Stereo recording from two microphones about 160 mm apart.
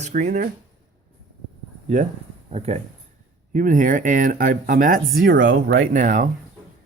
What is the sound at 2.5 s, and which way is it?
Speech, 45° right (ahead or behind).